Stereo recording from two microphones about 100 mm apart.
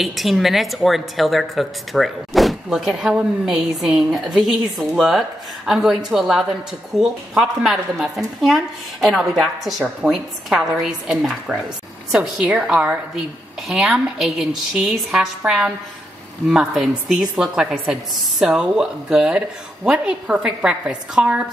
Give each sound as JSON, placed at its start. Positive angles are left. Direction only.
{"t": 0.0, "sound": "a woman's voice", "side_deg": 0}